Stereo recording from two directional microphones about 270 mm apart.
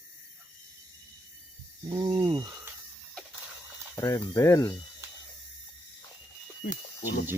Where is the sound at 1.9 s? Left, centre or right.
Centre.